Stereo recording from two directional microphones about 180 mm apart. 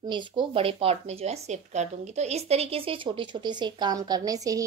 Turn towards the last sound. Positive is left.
turn(degrees=-20)  # may be behind; listen again after turning